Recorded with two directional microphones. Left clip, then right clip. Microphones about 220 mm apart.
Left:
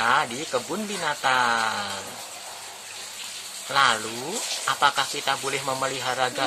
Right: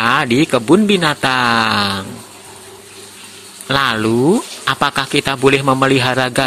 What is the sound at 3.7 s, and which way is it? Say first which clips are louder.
Speech: right 6 dB; 35° right (ahead or behind).